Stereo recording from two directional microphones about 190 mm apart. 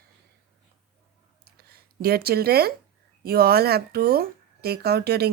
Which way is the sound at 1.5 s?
55° right (ahead or behind).